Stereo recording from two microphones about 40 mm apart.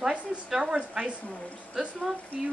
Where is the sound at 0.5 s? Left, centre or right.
Centre.